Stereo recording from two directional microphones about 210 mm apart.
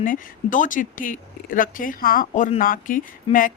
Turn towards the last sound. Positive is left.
turn(degrees=25)  # may be behind; listen again after turning